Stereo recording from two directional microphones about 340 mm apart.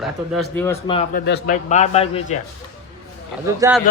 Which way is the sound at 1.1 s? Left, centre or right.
Left.